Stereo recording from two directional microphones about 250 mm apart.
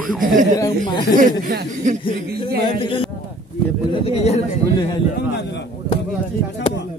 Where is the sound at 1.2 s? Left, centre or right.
Right.